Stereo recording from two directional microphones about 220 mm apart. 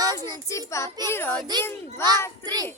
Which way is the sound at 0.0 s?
15° right (ahead or behind).